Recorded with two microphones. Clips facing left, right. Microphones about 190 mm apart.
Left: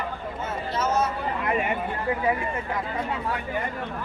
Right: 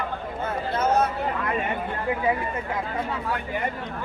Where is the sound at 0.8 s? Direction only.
60° right (ahead or behind).